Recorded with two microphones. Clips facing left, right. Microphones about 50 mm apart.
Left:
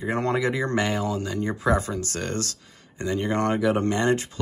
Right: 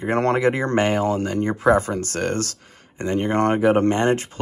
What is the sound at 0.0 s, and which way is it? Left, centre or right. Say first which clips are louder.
Speech: right 5 dB; right.